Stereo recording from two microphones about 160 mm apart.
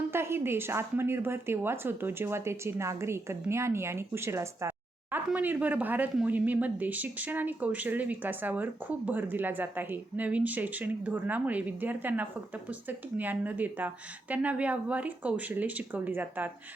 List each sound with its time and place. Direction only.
0.1 s speech: 15° right (ahead or behind)